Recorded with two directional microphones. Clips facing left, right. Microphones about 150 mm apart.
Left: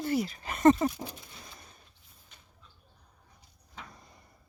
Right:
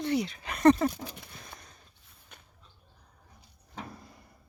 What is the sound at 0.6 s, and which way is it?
Speech, 20° left (ahead or behind).